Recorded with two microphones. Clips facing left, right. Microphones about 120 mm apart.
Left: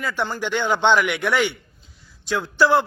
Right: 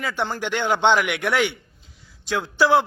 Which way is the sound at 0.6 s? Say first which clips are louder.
Left 1 dB; 15° right (ahead or behind).